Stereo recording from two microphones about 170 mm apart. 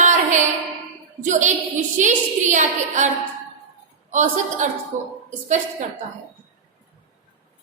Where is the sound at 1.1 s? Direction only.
45° right (ahead or behind).